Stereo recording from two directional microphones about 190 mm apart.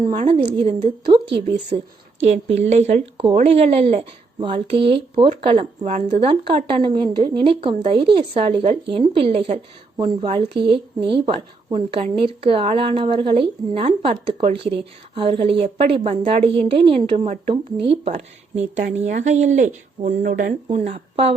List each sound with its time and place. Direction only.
0.1 s a woman's voice: 35° right (ahead or behind)